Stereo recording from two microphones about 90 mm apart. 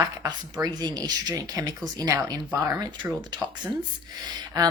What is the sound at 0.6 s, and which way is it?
A woman's voice, 50° right (ahead or behind).